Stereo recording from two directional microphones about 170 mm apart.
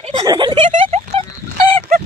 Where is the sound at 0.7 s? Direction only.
40° right (ahead or behind).